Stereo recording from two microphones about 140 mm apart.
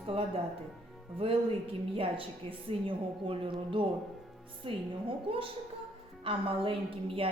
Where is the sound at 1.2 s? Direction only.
40° right (ahead or behind).